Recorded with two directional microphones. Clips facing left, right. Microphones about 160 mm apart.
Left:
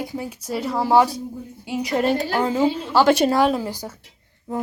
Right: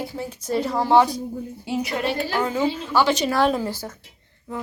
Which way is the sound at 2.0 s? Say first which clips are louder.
Left 8 dB; 40° left (ahead or behind).